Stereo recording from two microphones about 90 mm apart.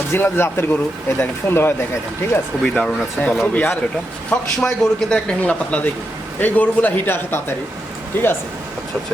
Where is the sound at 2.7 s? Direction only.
15° left (ahead or behind).